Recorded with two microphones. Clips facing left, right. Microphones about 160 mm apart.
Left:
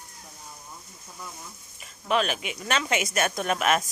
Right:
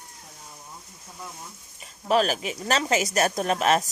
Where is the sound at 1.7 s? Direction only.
35° right (ahead or behind).